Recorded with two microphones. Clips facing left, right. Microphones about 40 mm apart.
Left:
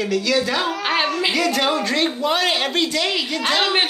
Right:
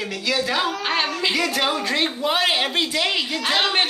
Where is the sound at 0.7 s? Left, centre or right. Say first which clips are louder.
Left 3 dB; centre.